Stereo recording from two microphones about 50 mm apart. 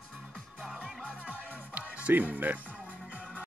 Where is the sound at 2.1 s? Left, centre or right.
Right.